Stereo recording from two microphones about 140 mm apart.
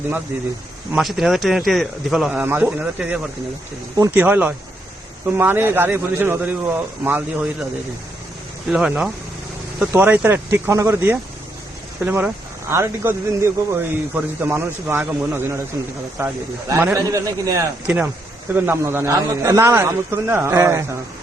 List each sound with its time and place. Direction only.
0.9 s speech: centre (ahead or behind)
8.7 s a man's voice: 5° right (ahead or behind)